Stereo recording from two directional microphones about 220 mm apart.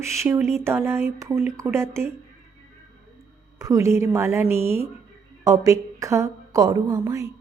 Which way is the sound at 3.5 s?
15° right (ahead or behind).